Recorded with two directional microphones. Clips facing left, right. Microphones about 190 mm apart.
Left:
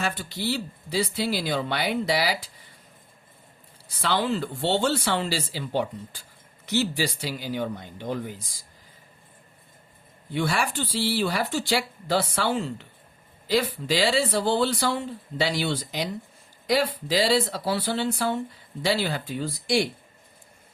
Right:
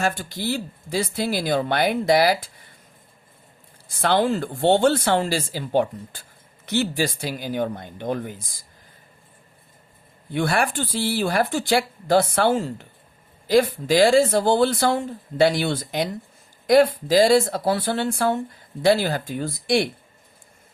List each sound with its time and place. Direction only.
0.0 s speech: 45° right (ahead or behind)
3.8 s speech: 50° right (ahead or behind)
10.3 s speech: 55° right (ahead or behind)